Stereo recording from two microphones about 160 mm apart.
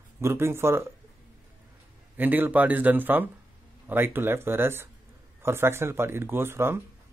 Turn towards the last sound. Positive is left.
turn(degrees=-15)  # may be behind; listen again after turning